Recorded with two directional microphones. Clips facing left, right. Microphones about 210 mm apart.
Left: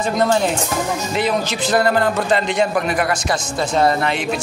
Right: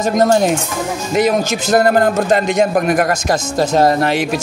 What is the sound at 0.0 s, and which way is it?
A man's voice, 45° right (ahead or behind).